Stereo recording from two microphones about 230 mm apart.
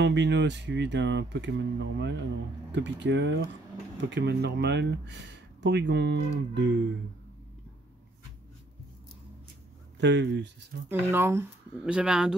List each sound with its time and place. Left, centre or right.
0.0 s speech: right
9.9 s speech: right
10.9 s speech: centre